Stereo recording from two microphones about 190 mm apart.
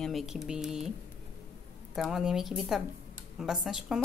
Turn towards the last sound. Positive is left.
turn(degrees=-5)  # may be behind; listen again after turning